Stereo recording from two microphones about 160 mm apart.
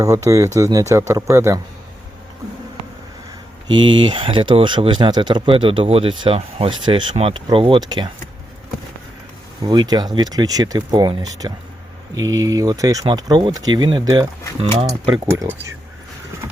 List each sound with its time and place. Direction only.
0.0 s speech: 20° right (ahead or behind)
3.7 s speech: 30° right (ahead or behind)
9.6 s speech: 25° right (ahead or behind)
14.6 s speech: 35° right (ahead or behind)
15.3 s speech: 15° right (ahead or behind)